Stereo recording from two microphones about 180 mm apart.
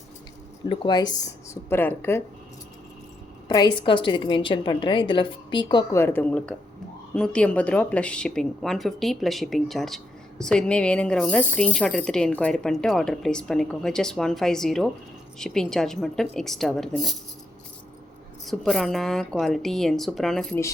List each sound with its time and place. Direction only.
0.7 s a woman's voice: 25° left (ahead or behind)
1.7 s a woman's voice: 10° left (ahead or behind)
3.5 s a woman's voice: 25° left (ahead or behind)
6.0 s a woman's voice: 10° left (ahead or behind)
18.4 s speech: centre (ahead or behind)